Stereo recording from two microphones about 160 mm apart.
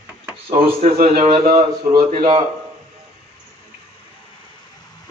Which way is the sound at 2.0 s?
60° right (ahead or behind).